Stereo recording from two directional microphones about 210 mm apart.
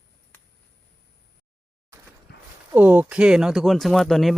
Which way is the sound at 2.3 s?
55° left (ahead or behind).